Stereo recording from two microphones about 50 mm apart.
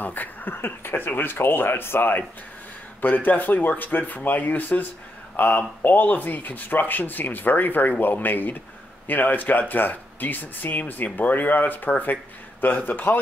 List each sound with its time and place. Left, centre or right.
0.0 s speech: left